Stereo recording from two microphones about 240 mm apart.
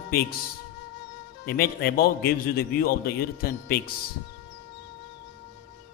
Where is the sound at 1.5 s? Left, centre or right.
Left.